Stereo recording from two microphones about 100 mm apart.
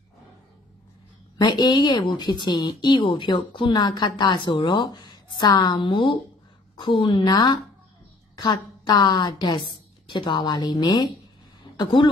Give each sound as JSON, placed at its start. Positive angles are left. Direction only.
{"t": 1.4, "sound": "a woman's voice", "side_deg": 45}